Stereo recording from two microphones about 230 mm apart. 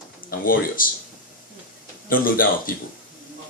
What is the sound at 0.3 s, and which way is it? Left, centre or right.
Speech, left.